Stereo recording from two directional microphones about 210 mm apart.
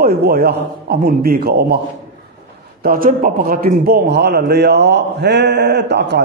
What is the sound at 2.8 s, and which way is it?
A man's voice, 40° right (ahead or behind).